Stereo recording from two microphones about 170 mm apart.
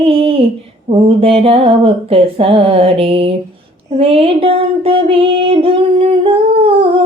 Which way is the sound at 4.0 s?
35° right (ahead or behind).